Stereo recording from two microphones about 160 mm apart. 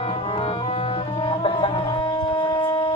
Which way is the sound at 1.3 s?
35° left (ahead or behind).